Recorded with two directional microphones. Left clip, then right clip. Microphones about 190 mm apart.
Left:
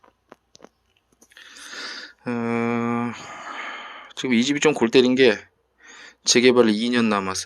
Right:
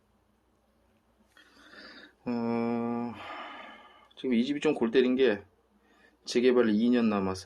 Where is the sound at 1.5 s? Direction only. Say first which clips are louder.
Left 15 dB; 10° left (ahead or behind).